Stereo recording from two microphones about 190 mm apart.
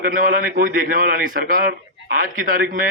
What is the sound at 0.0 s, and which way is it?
A man's voice, 50° right (ahead or behind).